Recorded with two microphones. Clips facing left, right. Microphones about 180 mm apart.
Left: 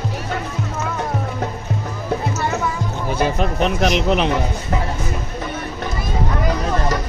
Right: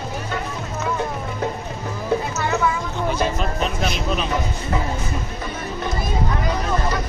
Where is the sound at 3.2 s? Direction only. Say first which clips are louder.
Left 8 dB; 60° left (ahead or behind).